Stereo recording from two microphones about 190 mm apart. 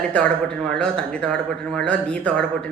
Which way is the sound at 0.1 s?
5° left (ahead or behind).